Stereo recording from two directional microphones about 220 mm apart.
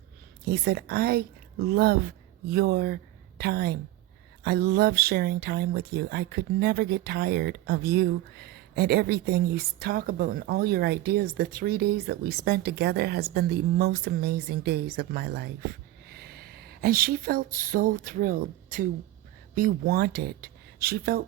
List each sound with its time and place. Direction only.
0.4 s speech: 45° right (ahead or behind)